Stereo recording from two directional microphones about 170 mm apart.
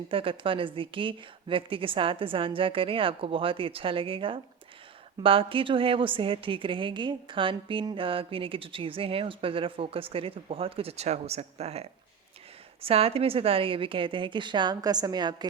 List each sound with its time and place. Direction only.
0.1 s a woman's voice: 30° right (ahead or behind)